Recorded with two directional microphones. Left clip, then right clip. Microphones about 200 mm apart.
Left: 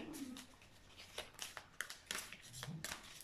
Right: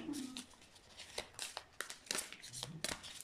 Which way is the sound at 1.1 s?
25° right (ahead or behind).